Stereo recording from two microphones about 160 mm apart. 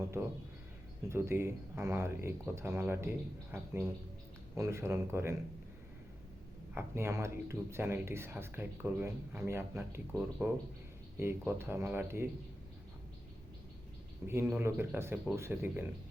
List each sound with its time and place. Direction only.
1.1 s speech: 15° right (ahead or behind)
6.7 s speech: 15° right (ahead or behind)
14.3 s speech: 15° right (ahead or behind)